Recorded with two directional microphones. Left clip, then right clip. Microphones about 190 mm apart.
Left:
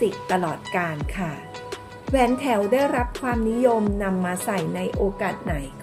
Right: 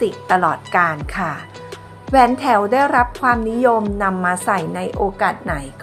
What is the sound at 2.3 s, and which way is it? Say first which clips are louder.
A woman's voice: right 6 dB; 15° right (ahead or behind).